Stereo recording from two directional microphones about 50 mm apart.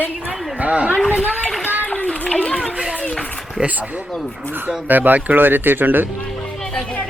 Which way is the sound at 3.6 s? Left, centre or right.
Centre.